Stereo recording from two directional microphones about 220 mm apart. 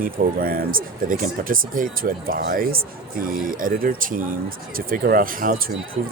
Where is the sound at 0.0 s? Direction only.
40° right (ahead or behind).